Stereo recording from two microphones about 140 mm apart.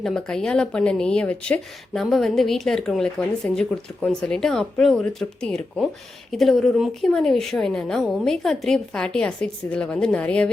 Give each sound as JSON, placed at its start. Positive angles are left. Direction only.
{"t": 0.0, "sound": "speech", "side_deg": 5}